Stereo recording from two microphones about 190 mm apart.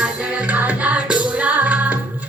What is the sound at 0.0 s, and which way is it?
Music, 10° right (ahead or behind).